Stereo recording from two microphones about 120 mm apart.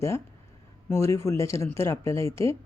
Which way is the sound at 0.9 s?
25° left (ahead or behind).